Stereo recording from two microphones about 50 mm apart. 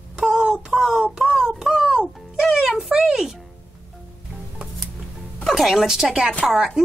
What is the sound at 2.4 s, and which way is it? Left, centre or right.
Speech, centre.